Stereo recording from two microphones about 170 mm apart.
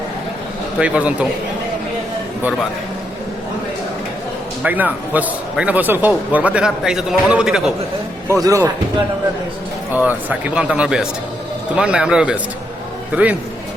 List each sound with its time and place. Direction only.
0.8 s speech: 5° right (ahead or behind)
4.6 s speech: 10° right (ahead or behind)
8.3 s speech: 20° right (ahead or behind)
9.9 s speech: 10° right (ahead or behind)